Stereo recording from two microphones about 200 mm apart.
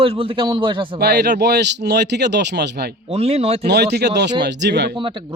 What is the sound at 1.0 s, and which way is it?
A man's voice, 55° right (ahead or behind).